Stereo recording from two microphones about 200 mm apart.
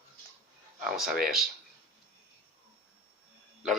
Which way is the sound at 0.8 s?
Centre (ahead or behind).